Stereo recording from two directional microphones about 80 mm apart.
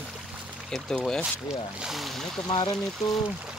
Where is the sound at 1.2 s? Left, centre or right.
Centre.